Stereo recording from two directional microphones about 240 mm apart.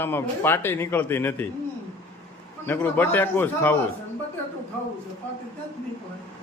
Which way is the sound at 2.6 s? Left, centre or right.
Centre.